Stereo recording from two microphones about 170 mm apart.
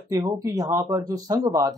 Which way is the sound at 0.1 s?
20° right (ahead or behind).